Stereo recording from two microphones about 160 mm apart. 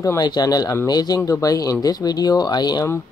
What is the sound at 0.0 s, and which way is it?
Speech, 25° left (ahead or behind).